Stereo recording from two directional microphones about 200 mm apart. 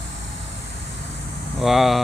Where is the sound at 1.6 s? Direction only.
Centre (ahead or behind).